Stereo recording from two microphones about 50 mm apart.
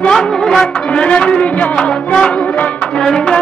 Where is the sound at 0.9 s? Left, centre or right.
Left.